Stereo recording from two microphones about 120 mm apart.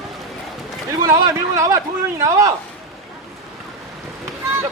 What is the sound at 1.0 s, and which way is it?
Speech, 25° right (ahead or behind).